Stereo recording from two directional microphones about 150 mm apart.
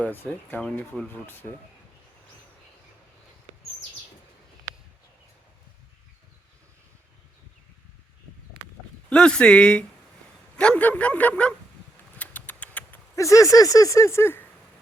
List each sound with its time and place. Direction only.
0.0 s speech: 10° left (ahead or behind)
9.0 s speech: 5° left (ahead or behind)
12.1 s a sound: 10° left (ahead or behind)